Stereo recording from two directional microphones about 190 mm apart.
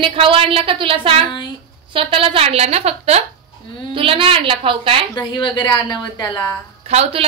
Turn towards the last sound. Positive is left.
turn(degrees=-35)  # may be behind; listen again after turning